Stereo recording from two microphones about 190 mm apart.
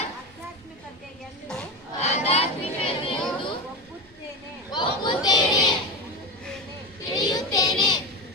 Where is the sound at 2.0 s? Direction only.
35° left (ahead or behind).